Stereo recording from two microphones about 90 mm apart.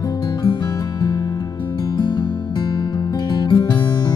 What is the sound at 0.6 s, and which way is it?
Music, 50° left (ahead or behind).